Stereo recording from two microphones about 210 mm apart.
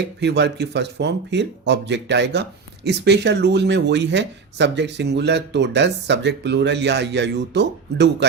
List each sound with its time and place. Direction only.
0.2 s speech: 55° right (ahead or behind)